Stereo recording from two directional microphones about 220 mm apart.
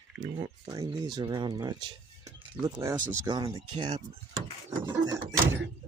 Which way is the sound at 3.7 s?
30° right (ahead or behind).